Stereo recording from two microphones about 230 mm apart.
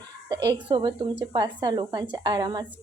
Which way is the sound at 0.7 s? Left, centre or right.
Right.